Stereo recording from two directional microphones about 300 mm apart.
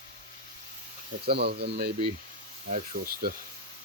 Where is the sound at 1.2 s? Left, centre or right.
Right.